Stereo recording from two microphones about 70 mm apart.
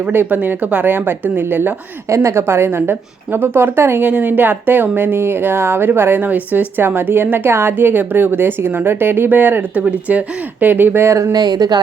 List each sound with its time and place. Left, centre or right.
0.0 s speech: right
2.0 s a woman's voice: right
4.0 s speech: right
11.1 s speech: right
11.3 s speech: right